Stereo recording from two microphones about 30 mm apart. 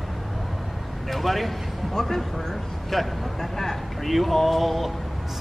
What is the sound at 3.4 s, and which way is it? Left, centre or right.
Speech, centre.